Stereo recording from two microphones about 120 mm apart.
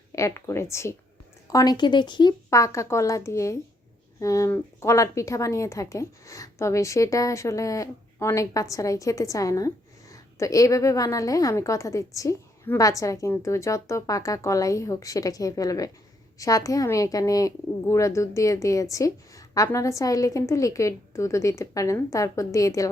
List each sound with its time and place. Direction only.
0.1 s a woman's voice: 25° left (ahead or behind); by 2.3 s 40° left (ahead or behind)
2.5 s a woman's voice: 25° left (ahead or behind)